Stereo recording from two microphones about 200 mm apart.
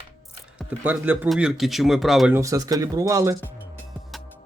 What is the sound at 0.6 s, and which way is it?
Speech, 5° right (ahead or behind).